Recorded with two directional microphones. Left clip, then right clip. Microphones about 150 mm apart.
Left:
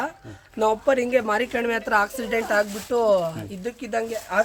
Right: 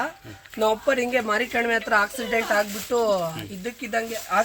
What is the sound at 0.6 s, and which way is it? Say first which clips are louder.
A man's voice: left 1 dB; 30° left (ahead or behind).